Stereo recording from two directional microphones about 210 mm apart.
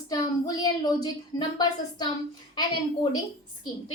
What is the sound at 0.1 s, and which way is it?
A woman's voice, 20° left (ahead or behind).